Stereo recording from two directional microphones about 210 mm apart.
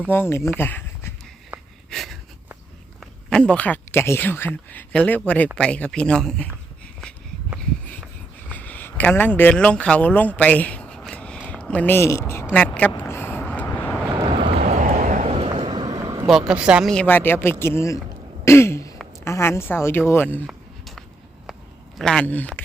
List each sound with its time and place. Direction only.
0.1 s speech: 10° left (ahead or behind)
1.5 s wheeze: 5° right (ahead or behind)
3.0 s speech: 5° left (ahead or behind)
7.9 s a sound: 5° left (ahead or behind)
12.5 s speech: 5° left (ahead or behind)
12.9 s vehicle: 10° left (ahead or behind)
14.3 s vehicle: 25° right (ahead or behind)
16.5 s speech: 5° right (ahead or behind); by 18.0 s 15° left (ahead or behind)
18.4 s throat clearing: 10° left (ahead or behind)
19.2 s speech: 10° left (ahead or behind)
20.5 s a sound: centre (ahead or behind)
21.9 s speech: 5° left (ahead or behind)